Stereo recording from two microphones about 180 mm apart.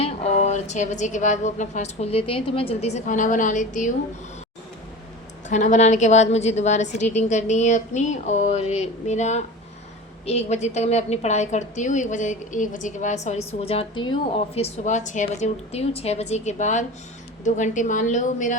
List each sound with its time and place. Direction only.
0.0 s a woman's voice: 40° left (ahead or behind)
5.5 s a woman's voice: 40° left (ahead or behind)